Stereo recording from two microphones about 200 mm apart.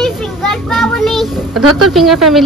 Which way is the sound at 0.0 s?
Centre (ahead or behind).